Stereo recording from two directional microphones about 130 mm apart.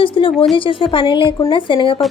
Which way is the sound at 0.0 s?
40° left (ahead or behind).